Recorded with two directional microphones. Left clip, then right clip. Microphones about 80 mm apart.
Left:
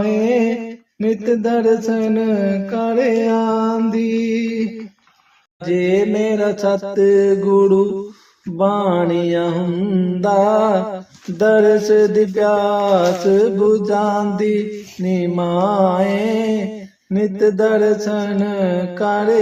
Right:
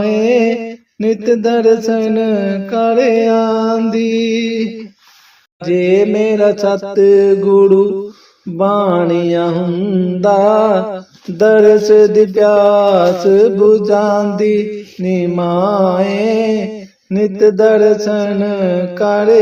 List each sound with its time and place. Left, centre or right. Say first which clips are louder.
0.0 s mantra: right 5 dB; right